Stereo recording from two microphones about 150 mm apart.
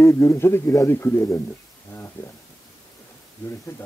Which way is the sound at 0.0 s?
20° left (ahead or behind).